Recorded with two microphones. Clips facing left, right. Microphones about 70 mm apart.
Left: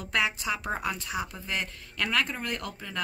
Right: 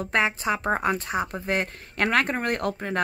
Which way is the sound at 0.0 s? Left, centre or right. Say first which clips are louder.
Right 5 dB; right.